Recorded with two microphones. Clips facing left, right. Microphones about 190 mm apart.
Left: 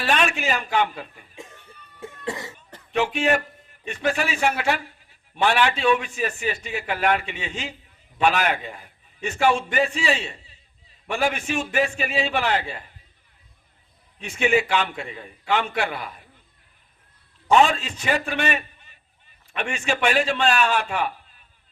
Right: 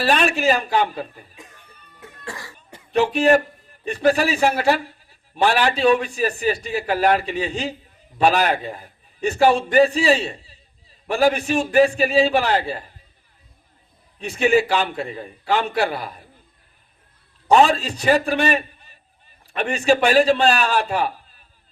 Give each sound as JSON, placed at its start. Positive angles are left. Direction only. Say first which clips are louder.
{"t": 0.0, "sound": "a man's voice", "louder": "right 5 dB", "side_deg": -35}
{"t": 2.0, "sound": "cough", "louder": "left 5 dB", "side_deg": 25}
{"t": 2.9, "sound": "a man's voice", "louder": "right 6 dB", "side_deg": -35}
{"t": 14.2, "sound": "a man's voice", "louder": "right 4 dB", "side_deg": -35}
{"t": 17.5, "sound": "a man's voice", "louder": "right 3 dB", "side_deg": -35}